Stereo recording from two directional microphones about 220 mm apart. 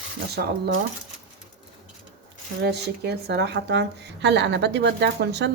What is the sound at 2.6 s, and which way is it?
Speech, 50° right (ahead or behind).